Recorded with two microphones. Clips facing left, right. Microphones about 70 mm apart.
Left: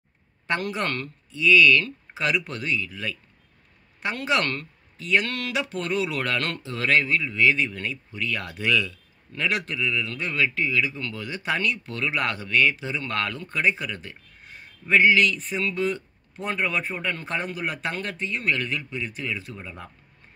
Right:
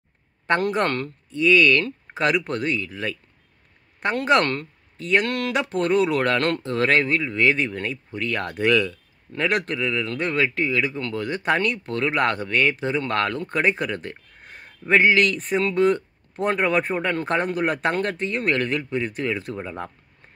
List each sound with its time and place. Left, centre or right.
0.5 s speech: right